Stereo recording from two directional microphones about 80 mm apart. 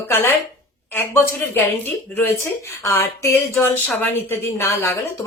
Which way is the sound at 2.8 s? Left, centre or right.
Left.